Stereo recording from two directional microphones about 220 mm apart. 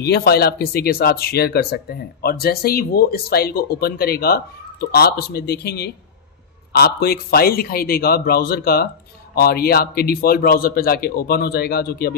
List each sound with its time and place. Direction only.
0.0 s speech: 45° left (ahead or behind)